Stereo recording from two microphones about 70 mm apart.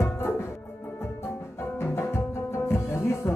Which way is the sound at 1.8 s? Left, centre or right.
Left.